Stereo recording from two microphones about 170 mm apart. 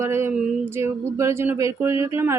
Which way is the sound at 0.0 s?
15° right (ahead or behind).